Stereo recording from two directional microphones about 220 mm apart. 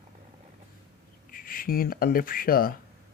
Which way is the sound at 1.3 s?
40° left (ahead or behind).